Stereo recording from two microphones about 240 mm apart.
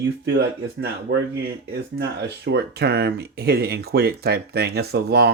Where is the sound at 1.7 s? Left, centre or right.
Right.